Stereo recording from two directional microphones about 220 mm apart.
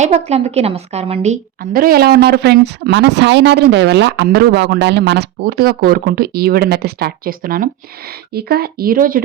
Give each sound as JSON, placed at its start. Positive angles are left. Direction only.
{"t": 0.0, "sound": "a woman's voice", "side_deg": -30}